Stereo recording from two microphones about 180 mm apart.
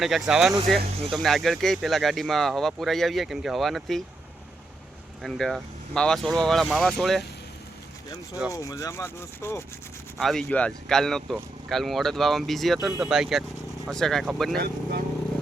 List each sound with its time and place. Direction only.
0.0 s speech: centre (ahead or behind)
5.2 s speech: centre (ahead or behind)
8.5 s speech: 15° left (ahead or behind)
10.2 s speech: centre (ahead or behind)
14.5 s speech: 55° right (ahead or behind)